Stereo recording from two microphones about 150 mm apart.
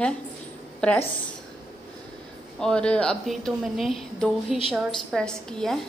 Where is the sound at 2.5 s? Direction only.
5° left (ahead or behind).